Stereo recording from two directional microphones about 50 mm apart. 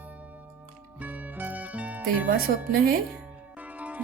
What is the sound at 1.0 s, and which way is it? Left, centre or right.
Music, right.